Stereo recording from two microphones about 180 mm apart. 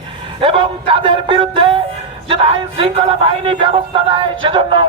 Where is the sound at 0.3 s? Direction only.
30° right (ahead or behind).